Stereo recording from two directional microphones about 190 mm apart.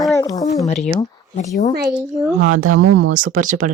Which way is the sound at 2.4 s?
45° right (ahead or behind).